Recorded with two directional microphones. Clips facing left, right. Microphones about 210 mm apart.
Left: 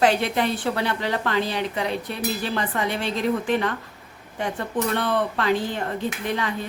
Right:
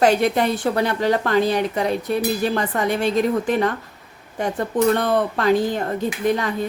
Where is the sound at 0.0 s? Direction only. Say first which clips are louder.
Right 4 dB; 45° right (ahead or behind).